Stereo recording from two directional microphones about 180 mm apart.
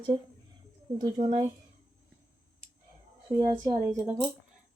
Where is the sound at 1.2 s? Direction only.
40° right (ahead or behind).